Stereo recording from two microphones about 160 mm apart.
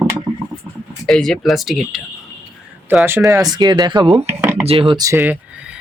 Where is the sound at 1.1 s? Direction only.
5° left (ahead or behind).